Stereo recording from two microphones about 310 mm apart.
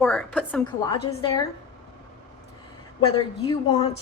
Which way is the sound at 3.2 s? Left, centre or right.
Centre.